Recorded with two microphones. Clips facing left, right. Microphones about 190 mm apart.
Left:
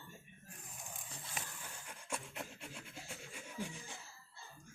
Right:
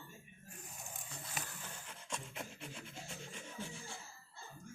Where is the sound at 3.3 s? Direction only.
15° left (ahead or behind).